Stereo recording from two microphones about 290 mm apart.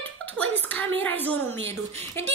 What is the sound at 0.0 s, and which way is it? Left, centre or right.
A child's voice, centre.